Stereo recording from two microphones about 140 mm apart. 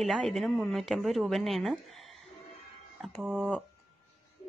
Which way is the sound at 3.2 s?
5° right (ahead or behind).